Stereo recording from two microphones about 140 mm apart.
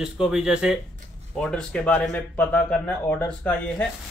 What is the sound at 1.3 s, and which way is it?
Speech, 5° left (ahead or behind).